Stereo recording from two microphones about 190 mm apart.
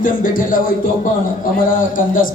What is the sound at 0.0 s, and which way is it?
Speech, 45° left (ahead or behind).